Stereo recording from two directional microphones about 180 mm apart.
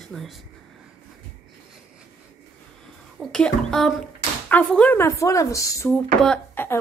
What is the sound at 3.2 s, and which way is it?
Speech, 5° left (ahead or behind).